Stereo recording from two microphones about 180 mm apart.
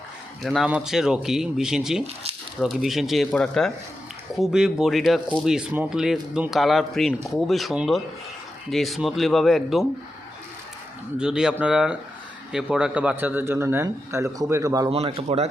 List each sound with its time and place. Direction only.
0.4 s speech: centre (ahead or behind)
11.2 s speech: 5° right (ahead or behind)
14.8 s speech: 30° right (ahead or behind)